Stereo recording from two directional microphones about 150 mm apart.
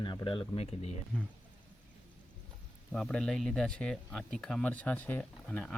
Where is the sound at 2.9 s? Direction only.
5° left (ahead or behind).